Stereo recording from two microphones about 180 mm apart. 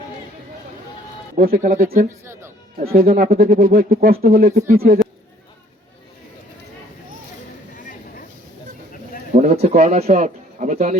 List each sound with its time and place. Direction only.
1.4 s speech: 55° right (ahead or behind)
2.0 s speech: 15° right (ahead or behind)
2.7 s speech: 55° right (ahead or behind)
9.3 s a sound: 40° right (ahead or behind)
9.7 s speech: 40° right (ahead or behind)